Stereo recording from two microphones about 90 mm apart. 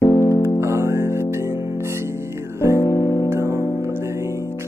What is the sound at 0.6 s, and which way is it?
Music, 30° right (ahead or behind).